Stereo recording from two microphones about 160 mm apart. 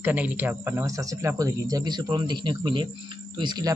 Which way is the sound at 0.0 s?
10° right (ahead or behind).